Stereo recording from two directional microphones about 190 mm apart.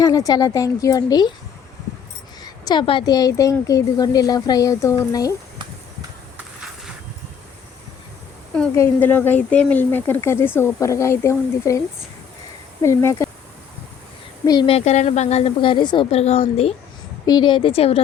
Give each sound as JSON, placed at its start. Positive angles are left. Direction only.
{"t": 0.0, "sound": "a woman's voice", "side_deg": 20}
{"t": 2.4, "sound": "a woman's voice", "side_deg": 20}
{"t": 8.7, "sound": "speech", "side_deg": 10}
{"t": 12.8, "sound": "speech", "side_deg": 15}
{"t": 14.4, "sound": "a woman's voice", "side_deg": 20}
{"t": 14.8, "sound": "a woman's voice", "side_deg": 35}